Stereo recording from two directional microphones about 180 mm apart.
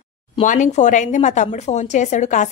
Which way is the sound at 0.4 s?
45° left (ahead or behind).